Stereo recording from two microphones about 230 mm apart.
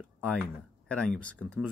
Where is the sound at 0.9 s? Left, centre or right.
Centre.